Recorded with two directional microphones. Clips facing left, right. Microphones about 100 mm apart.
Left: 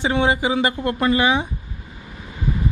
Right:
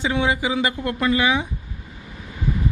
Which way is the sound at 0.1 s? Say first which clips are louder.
Left 3 dB; 45° left (ahead or behind).